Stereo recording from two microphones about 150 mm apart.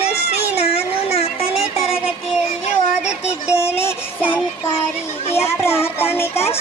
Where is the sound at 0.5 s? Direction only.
45° left (ahead or behind).